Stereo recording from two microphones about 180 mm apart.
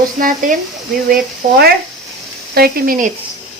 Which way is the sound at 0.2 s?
50° right (ahead or behind).